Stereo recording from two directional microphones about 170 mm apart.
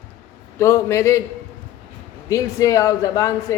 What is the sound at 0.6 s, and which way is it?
Speech, 15° left (ahead or behind).